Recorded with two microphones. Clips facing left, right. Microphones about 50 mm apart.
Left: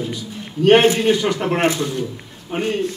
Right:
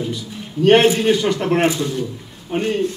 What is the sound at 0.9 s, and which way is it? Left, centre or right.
A man's voice, centre.